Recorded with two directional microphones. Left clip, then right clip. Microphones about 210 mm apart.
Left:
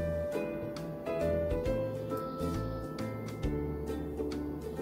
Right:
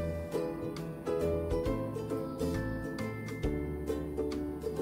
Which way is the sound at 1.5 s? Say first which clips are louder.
Left 1 dB; centre (ahead or behind).